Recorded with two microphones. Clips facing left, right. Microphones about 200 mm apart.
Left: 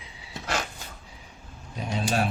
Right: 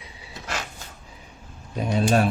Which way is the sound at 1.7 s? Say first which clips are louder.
Right 6 dB; 55° right (ahead or behind).